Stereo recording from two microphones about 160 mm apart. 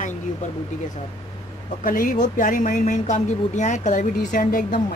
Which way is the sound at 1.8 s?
60° left (ahead or behind).